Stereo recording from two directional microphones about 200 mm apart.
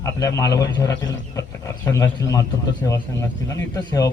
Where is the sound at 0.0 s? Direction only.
15° left (ahead or behind).